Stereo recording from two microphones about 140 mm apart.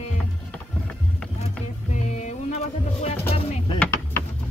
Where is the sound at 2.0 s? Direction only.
55° left (ahead or behind).